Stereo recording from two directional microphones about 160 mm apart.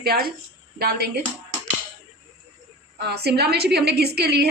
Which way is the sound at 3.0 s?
90° right.